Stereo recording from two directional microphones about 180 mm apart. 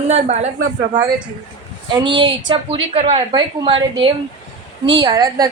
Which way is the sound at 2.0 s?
25° right (ahead or behind).